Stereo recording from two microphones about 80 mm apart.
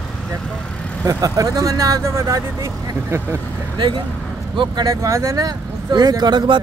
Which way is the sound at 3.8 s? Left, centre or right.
Right.